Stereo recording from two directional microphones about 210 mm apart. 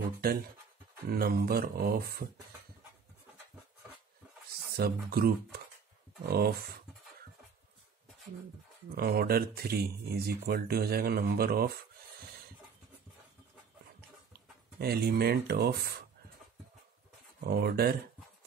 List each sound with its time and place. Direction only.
0.2 s speech: 45° right (ahead or behind)
4.7 s speech: 45° right (ahead or behind)
8.9 s speech: 45° right (ahead or behind)
14.8 s speech: 50° right (ahead or behind)
17.4 s speech: 50° right (ahead or behind)